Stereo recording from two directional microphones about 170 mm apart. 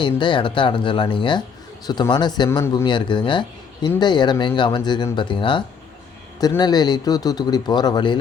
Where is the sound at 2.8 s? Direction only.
30° left (ahead or behind).